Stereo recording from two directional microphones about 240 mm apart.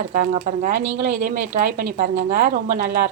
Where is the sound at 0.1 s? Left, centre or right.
Right.